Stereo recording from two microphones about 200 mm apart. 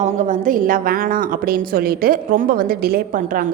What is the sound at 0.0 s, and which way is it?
A woman's voice, 40° right (ahead or behind).